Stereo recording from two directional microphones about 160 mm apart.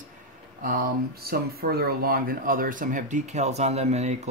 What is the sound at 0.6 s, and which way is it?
Speech, 65° right (ahead or behind).